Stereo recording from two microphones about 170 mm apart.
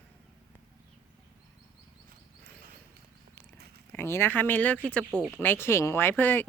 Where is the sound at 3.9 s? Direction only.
15° left (ahead or behind).